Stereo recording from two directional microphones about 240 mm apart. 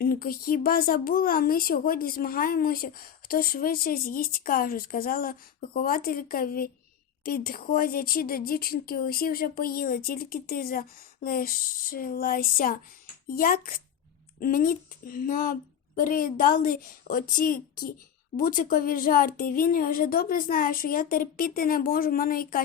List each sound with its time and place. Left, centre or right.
0.0 s speech: left